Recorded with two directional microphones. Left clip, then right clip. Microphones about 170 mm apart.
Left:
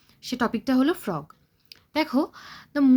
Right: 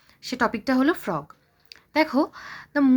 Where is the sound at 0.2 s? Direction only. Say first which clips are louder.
Right 3 dB; 30° left (ahead or behind).